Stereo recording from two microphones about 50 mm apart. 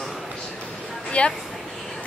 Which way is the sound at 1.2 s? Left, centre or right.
Left.